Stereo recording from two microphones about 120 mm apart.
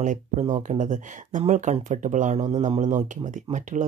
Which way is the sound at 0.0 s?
90° right.